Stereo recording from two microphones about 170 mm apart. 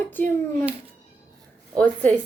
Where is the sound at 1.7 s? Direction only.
10° left (ahead or behind).